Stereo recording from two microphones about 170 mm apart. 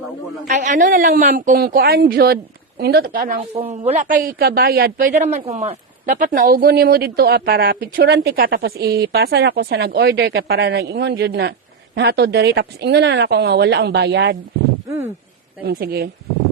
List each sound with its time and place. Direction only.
0.4 s a woman's voice: 45° right (ahead or behind)
3.5 s a woman's voice: 35° right (ahead or behind); by 14.3 s 90° right
14.8 s speech: 15° right (ahead or behind)
15.6 s a woman's voice: 60° right (ahead or behind)